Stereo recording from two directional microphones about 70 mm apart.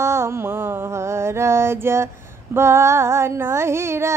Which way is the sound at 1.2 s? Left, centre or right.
Right.